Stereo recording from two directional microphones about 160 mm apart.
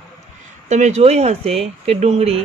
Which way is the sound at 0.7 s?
45° right (ahead or behind).